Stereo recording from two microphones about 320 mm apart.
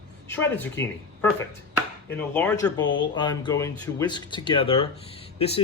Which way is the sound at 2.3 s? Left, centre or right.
Centre.